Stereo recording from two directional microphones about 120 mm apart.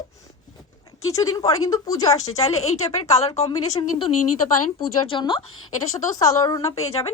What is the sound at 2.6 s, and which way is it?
Speech, 65° left (ahead or behind).